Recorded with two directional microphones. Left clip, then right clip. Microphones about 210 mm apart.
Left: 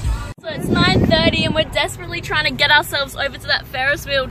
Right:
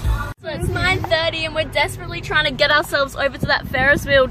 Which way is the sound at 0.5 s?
10° left (ahead or behind).